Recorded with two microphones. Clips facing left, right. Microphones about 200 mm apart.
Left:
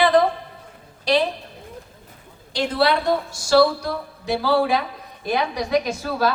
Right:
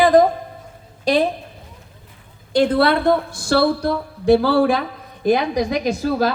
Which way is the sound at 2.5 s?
55° right (ahead or behind).